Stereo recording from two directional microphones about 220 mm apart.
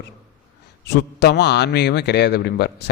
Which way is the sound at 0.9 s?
50° left (ahead or behind).